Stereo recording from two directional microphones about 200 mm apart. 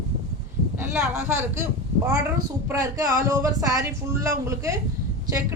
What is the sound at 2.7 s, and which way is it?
Speech, 15° right (ahead or behind).